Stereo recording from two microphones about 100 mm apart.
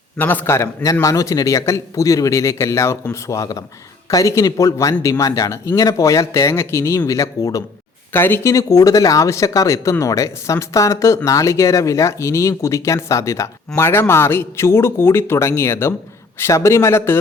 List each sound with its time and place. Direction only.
0.2 s a man's voice: 20° left (ahead or behind)
8.1 s speech: 20° left (ahead or behind)
8.5 s a man's voice: 35° left (ahead or behind)